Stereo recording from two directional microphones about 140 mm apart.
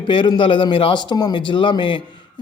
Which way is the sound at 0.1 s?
35° left (ahead or behind).